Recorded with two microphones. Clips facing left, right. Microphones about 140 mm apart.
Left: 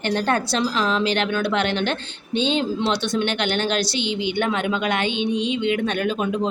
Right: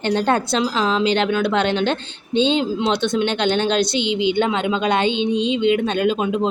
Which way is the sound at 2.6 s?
20° right (ahead or behind).